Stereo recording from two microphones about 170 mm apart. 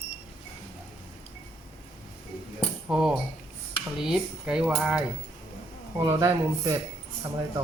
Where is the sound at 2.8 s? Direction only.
5° right (ahead or behind).